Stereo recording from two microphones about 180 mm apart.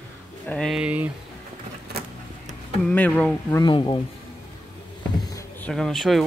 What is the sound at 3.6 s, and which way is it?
Speech, 25° left (ahead or behind).